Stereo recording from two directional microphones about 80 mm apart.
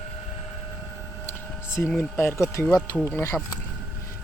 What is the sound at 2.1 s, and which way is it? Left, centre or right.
Speech, left.